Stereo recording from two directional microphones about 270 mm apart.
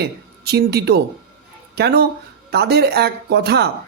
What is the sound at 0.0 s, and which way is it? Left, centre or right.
A woman's voice, right.